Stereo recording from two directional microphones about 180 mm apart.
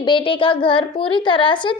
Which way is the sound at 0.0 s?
25° left (ahead or behind).